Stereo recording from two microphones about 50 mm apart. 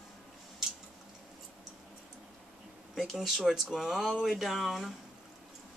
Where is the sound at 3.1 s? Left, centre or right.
Centre.